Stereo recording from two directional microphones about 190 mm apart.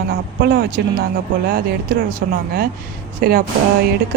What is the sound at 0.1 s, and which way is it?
Speech, 55° right (ahead or behind).